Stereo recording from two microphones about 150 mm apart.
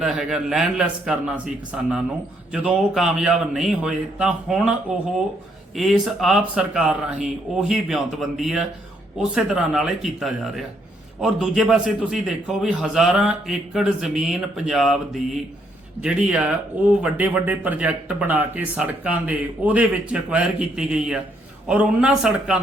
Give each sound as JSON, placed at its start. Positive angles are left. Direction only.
{"t": 0.0, "sound": "a man's voice", "side_deg": -5}